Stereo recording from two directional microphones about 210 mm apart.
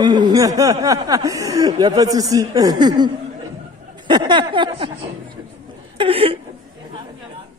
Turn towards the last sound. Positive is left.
turn(degrees=-25)  # may be behind; listen again after turning